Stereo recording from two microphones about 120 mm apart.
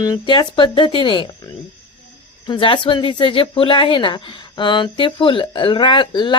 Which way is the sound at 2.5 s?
45° left (ahead or behind).